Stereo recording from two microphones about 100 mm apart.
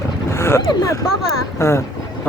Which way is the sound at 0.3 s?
25° left (ahead or behind).